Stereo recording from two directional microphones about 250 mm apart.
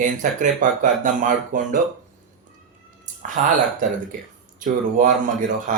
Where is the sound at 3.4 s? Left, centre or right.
Right.